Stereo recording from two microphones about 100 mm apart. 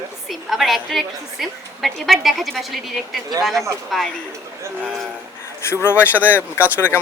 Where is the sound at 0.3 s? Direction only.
Centre (ahead or behind).